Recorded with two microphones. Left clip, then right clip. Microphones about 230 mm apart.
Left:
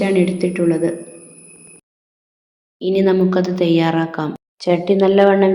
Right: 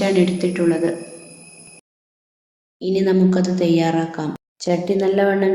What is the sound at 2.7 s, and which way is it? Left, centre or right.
A woman's voice, centre.